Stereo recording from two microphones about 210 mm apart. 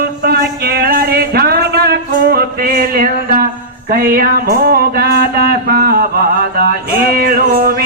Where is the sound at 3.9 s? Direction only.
45° right (ahead or behind).